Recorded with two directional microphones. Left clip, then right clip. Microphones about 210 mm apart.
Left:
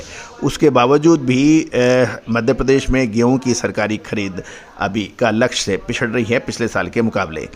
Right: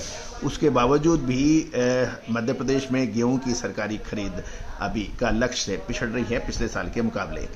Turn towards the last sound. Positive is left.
turn(degrees=35)  # may be behind; listen again after turning